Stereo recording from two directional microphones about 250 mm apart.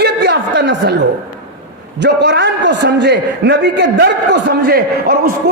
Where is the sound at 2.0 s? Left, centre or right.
Right.